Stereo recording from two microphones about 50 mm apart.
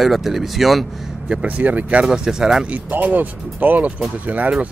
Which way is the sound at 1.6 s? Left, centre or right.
Right.